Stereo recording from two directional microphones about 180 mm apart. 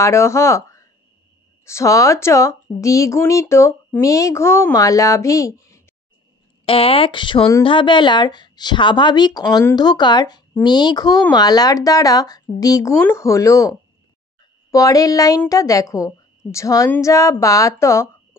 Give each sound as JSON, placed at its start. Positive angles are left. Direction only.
{"t": 0.0, "sound": "speech", "side_deg": 15}
{"t": 6.6, "sound": "speech", "side_deg": 30}